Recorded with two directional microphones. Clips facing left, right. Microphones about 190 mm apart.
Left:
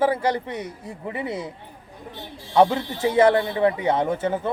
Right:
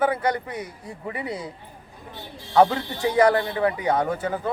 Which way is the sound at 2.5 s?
20° left (ahead or behind).